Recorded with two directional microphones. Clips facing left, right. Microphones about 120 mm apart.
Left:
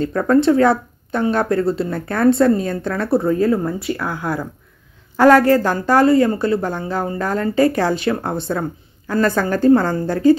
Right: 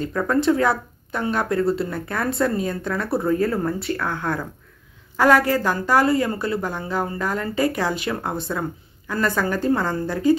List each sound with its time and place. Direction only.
0.0 s speech: 30° left (ahead or behind); by 4.5 s 10° left (ahead or behind)
5.1 s a woman's voice: 30° left (ahead or behind)